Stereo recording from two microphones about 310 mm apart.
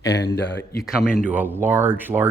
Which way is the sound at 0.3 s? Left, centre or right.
Left.